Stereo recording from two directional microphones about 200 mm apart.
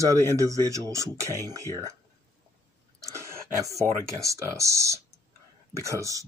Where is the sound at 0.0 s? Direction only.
15° right (ahead or behind).